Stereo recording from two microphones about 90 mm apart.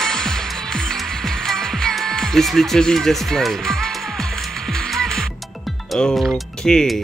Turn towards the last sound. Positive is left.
turn(degrees=5)  # may be behind; listen again after turning